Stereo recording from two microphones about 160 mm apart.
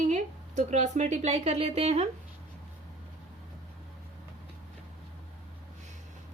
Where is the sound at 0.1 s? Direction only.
50° right (ahead or behind).